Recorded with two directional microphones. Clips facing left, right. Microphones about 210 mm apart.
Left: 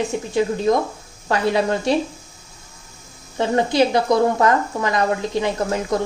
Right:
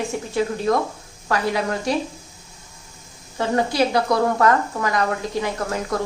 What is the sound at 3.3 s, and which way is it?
A woman's voice, 20° left (ahead or behind).